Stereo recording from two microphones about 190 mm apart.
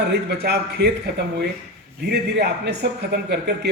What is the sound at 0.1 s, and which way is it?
Speech, 60° right (ahead or behind).